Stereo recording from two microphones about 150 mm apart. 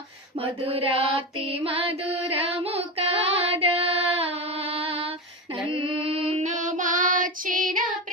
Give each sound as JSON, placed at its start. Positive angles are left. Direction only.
{"t": 0.3, "sound": "female singing", "side_deg": -40}
{"t": 6.3, "sound": "child singing", "side_deg": -55}